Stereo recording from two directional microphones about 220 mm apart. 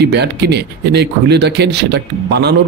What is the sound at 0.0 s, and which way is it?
Speech, 50° right (ahead or behind).